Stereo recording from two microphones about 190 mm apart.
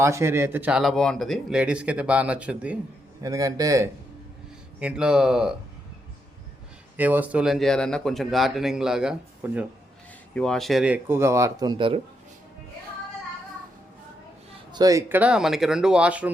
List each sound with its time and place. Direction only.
0.0 s speech: 15° right (ahead or behind)
3.2 s speech: 20° right (ahead or behind)
4.8 s speech: 5° right (ahead or behind)
6.9 s speech: 10° right (ahead or behind); by 11.9 s 25° right (ahead or behind)
14.7 s speech: 20° right (ahead or behind)